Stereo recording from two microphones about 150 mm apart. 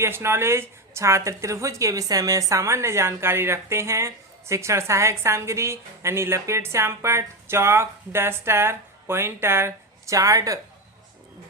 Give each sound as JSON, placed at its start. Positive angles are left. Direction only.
{"t": 0.0, "sound": "speech", "side_deg": -15}